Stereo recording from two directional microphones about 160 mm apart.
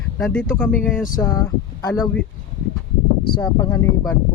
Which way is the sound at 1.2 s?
20° left (ahead or behind).